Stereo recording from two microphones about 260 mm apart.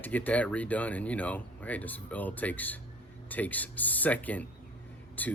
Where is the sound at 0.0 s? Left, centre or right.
Centre.